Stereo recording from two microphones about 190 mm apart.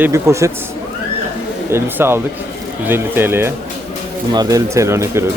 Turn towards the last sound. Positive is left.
turn(degrees=-15)  # may be behind; listen again after turning